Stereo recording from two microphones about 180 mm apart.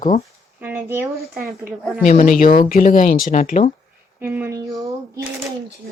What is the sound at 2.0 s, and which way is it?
Speech, 45° left (ahead or behind).